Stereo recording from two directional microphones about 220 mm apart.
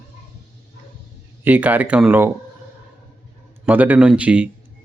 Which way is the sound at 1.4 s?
5° right (ahead or behind).